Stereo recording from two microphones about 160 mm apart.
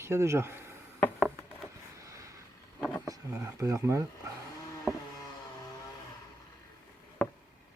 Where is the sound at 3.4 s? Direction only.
20° right (ahead or behind).